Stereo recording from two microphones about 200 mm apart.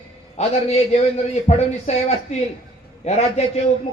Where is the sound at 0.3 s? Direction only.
35° left (ahead or behind).